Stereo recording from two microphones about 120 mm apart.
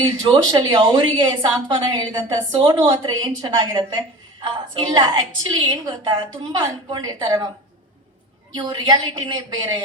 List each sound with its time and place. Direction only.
0.0 s a woman's voice: 35° right (ahead or behind)
8.5 s a woman's voice: 35° right (ahead or behind)